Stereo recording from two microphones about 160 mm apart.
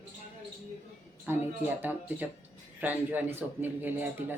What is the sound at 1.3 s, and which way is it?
A man's voice, 15° right (ahead or behind).